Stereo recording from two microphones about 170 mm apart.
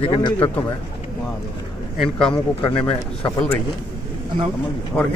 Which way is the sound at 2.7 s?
30° left (ahead or behind).